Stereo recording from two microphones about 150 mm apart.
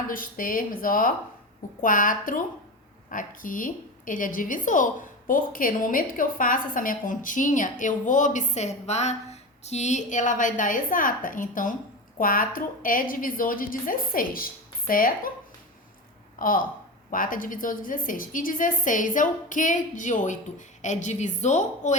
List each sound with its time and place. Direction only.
0.1 s a woman's voice: 70° left (ahead or behind)
16.4 s a woman's voice: 70° left (ahead or behind)